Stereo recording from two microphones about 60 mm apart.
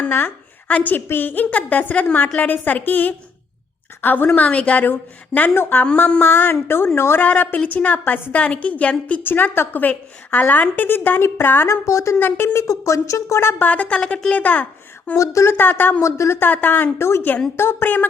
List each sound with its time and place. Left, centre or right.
0.7 s a woman's voice: left
4.3 s a woman's voice: left
5.5 s a woman's voice: left
7.2 s a woman's voice: left
9.2 s a woman's voice: left
11.7 s a woman's voice: left
13.6 s a woman's voice: left
15.1 s speech: left
15.4 s a woman's voice: left
16.0 s a woman's voice: left
16.4 s a woman's voice: left
17.8 s a woman's voice: left